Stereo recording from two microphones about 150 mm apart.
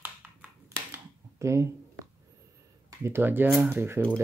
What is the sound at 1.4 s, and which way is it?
Speech, 20° right (ahead or behind).